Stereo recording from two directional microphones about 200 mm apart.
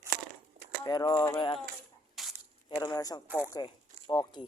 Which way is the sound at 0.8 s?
20° left (ahead or behind).